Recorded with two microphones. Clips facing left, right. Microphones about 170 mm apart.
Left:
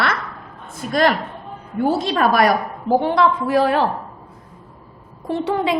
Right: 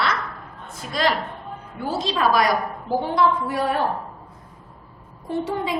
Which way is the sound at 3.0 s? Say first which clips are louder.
Left 3 dB; 70° left (ahead or behind).